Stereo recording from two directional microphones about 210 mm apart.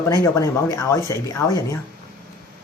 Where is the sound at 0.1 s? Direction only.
15° left (ahead or behind).